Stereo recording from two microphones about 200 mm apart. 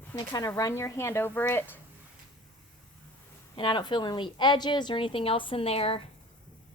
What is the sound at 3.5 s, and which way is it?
Speech, 25° left (ahead or behind).